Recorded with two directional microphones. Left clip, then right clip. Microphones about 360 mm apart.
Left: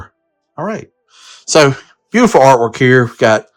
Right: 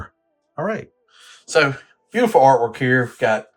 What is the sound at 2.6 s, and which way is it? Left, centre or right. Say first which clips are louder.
Speech: left 8 dB; centre.